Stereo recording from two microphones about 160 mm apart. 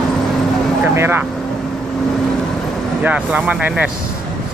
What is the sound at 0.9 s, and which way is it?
Speech, 15° right (ahead or behind).